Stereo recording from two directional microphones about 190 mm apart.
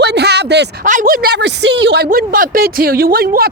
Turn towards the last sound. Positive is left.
turn(degrees=-50)  # may be behind; listen again after turning